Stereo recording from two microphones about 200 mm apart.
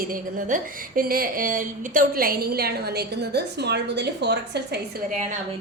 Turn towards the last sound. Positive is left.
turn(degrees=-55)  # may be behind; listen again after turning